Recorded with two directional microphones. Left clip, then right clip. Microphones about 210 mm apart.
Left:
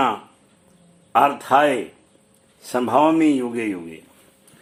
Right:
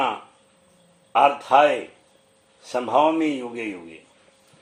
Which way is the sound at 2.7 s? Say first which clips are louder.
Left 2 dB; 30° left (ahead or behind).